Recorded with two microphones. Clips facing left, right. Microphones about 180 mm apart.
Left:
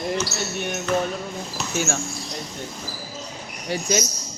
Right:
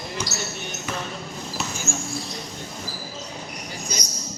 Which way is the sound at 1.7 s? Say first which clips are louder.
Left 6 dB; 70° left (ahead or behind).